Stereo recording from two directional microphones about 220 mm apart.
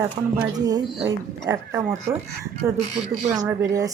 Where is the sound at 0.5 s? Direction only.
15° right (ahead or behind).